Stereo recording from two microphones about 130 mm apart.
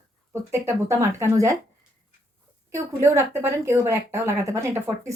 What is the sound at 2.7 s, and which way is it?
A woman's voice, 20° right (ahead or behind).